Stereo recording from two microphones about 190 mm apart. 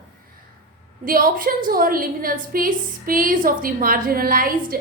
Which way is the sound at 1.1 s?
50° right (ahead or behind).